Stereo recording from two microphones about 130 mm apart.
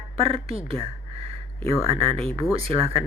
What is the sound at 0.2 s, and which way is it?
Speech, 50° right (ahead or behind).